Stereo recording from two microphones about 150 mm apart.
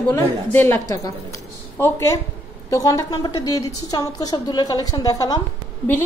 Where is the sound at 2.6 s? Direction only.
20° left (ahead or behind).